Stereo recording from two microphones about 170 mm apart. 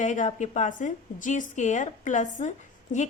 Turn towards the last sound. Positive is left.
turn(degrees=45)  # may be behind; listen again after turning